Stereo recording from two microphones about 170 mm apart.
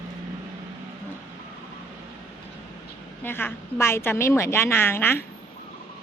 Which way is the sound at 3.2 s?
10° left (ahead or behind).